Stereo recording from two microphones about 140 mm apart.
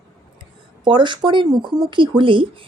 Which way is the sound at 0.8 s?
35° right (ahead or behind).